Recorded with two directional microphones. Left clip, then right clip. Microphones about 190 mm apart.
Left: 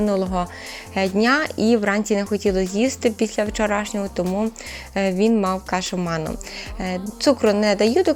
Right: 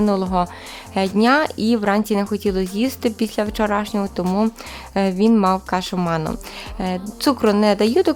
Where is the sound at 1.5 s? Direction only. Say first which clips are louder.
Left 1 dB; 50° right (ahead or behind).